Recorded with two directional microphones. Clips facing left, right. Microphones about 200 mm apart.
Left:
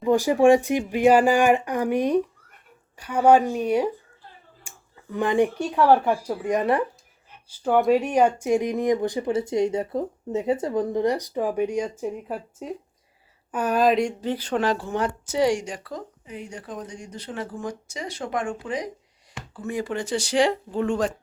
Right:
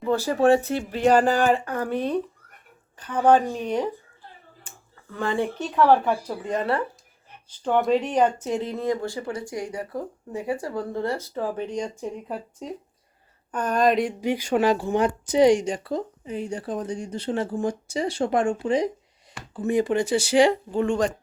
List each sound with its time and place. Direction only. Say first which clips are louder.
0.0 s speech: left 3 dB; 15° left (ahead or behind)
4.7 s a sound: even; 10° left (ahead or behind)
5.1 s speech: left 4 dB; 15° left (ahead or behind); by 14.1 s centre (ahead or behind)
14.2 s speech: right 3 dB; 10° right (ahead or behind); by 21.1 s 5° left (ahead or behind)